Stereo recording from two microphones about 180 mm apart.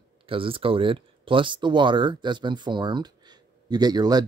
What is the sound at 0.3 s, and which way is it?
Speech, 30° right (ahead or behind).